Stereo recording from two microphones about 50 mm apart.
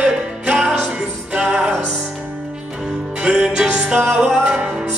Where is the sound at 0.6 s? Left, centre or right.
Centre.